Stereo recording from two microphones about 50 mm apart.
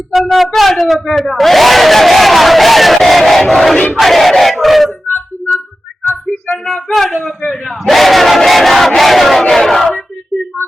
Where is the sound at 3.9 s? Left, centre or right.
Centre.